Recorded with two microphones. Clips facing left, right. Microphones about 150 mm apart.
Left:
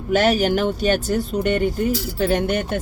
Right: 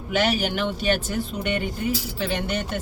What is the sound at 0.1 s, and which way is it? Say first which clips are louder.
Speech: left 6 dB; 45° left (ahead or behind).